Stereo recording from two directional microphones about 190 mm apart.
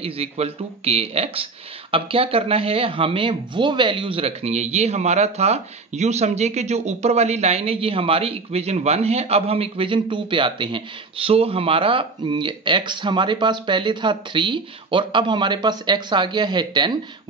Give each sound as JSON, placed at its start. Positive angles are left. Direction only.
{"t": 0.0, "sound": "speech", "side_deg": -30}